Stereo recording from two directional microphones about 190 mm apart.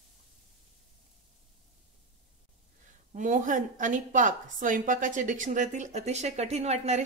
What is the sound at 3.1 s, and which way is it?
A woman's voice, 40° right (ahead or behind).